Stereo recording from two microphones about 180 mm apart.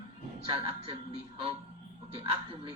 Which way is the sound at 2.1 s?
30° right (ahead or behind).